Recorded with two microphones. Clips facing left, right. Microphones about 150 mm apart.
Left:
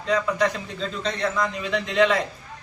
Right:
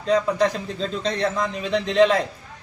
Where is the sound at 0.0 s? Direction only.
35° right (ahead or behind).